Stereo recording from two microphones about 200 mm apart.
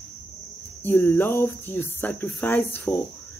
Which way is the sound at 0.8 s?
10° left (ahead or behind).